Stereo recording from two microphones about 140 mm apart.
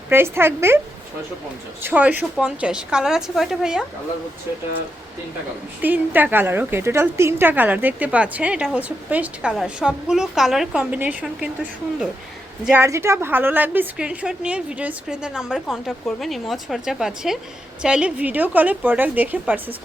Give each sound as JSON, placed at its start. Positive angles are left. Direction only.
{"t": 0.1, "sound": "a woman's voice", "side_deg": -15}
{"t": 1.8, "sound": "a woman's voice", "side_deg": -10}
{"t": 5.8, "sound": "a woman's voice", "side_deg": -15}
{"t": 12.7, "sound": "a woman's voice", "side_deg": -20}